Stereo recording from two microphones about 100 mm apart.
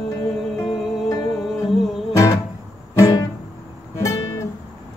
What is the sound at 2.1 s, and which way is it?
Music, 35° left (ahead or behind).